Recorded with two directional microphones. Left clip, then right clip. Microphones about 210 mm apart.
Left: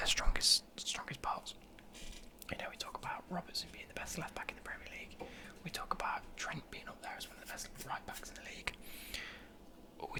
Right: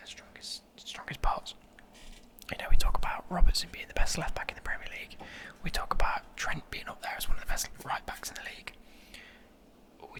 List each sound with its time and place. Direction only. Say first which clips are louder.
0.0 s whispering: left 12 dB; 25° left (ahead or behind)
1.0 s whispering: right 7 dB; 10° right (ahead or behind)
9.1 s a sound: left 5 dB; 10° left (ahead or behind)
10.0 s whispering: left 3 dB; 10° left (ahead or behind)